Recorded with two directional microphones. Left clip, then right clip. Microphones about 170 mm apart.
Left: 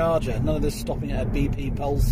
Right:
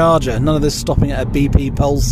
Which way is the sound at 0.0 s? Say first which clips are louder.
Right 10 dB; 40° right (ahead or behind).